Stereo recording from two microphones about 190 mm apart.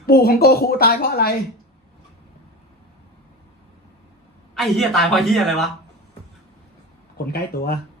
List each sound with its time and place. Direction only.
0.0 s speech: 55° left (ahead or behind)
4.5 s a man's voice: centre (ahead or behind)
7.3 s speech: 55° left (ahead or behind)